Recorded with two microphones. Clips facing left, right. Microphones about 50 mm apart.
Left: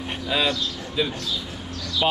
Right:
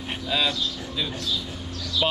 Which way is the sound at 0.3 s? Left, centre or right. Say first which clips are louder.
Left 2 dB; centre.